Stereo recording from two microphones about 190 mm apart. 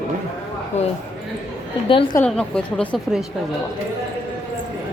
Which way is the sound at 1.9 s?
30° left (ahead or behind).